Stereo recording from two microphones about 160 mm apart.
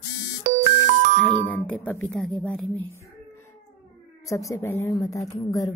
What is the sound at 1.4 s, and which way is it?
Speech, 10° left (ahead or behind).